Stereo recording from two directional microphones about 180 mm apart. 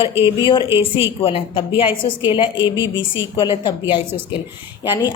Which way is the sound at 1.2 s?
30° left (ahead or behind).